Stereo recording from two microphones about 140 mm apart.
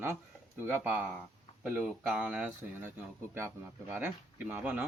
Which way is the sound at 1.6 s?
5° right (ahead or behind).